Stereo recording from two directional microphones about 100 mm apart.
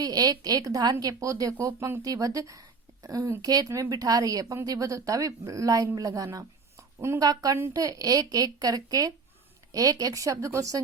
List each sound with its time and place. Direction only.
0.0 s a woman's voice: 40° right (ahead or behind)